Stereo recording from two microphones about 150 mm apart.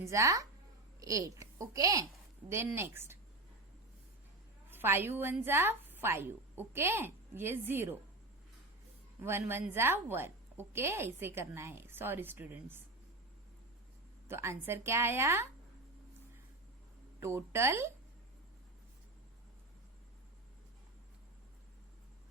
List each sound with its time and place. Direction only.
0.0 s a child's voice: 20° right (ahead or behind)
4.7 s a woman's voice: 15° right (ahead or behind)
9.2 s a woman's voice: 15° right (ahead or behind)
14.3 s a woman's voice: 15° right (ahead or behind)
17.2 s a woman's voice: 15° right (ahead or behind)